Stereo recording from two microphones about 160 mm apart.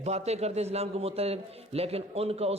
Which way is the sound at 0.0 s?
40° right (ahead or behind).